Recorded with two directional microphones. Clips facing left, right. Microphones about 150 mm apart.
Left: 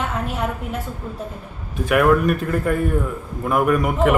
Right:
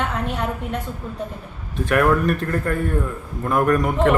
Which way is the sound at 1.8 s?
5° left (ahead or behind).